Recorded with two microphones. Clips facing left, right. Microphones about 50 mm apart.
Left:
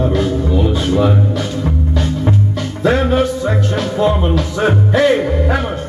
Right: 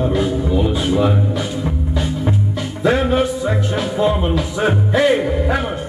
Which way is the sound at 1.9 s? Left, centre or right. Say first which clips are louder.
Left 2 dB; centre.